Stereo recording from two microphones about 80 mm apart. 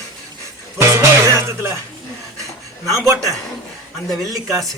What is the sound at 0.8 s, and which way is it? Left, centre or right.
Music, right.